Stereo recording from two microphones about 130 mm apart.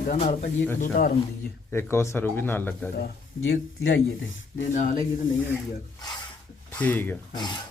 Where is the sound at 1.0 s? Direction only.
90° left.